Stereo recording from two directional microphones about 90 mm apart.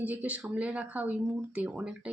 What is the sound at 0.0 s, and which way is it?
Speech, 15° right (ahead or behind).